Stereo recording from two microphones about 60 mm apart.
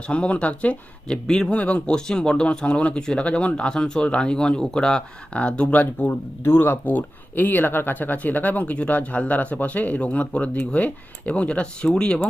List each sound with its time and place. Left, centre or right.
0.1 s speech: centre